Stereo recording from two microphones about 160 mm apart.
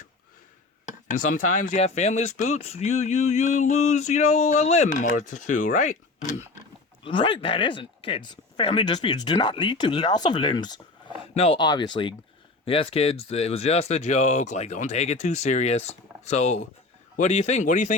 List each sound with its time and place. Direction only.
1.1 s speech: 55° left (ahead or behind)
7.0 s speech: 30° left (ahead or behind); by 17.9 s 50° left (ahead or behind)